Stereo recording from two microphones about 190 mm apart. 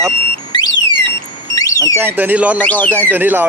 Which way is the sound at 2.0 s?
10° right (ahead or behind).